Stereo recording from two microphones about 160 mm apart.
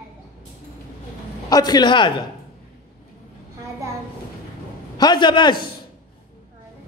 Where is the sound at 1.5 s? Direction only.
25° left (ahead or behind).